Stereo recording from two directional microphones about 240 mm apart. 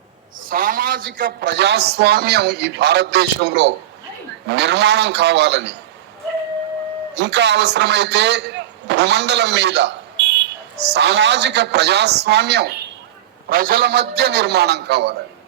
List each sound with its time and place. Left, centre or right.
0.5 s a man's voice: right
7.2 s a man's voice: right